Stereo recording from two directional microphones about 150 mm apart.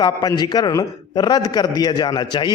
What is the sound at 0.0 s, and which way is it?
Speech, 25° left (ahead or behind).